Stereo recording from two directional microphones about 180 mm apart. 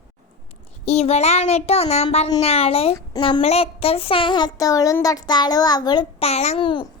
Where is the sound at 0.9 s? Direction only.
35° left (ahead or behind).